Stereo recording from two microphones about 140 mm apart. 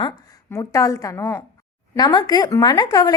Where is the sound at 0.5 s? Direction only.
25° left (ahead or behind).